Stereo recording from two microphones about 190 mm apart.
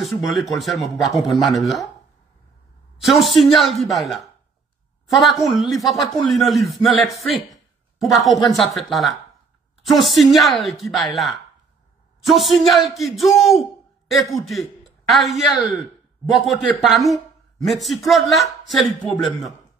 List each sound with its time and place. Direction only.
0.0 s a man's voice: centre (ahead or behind)
3.0 s a man's voice: centre (ahead or behind)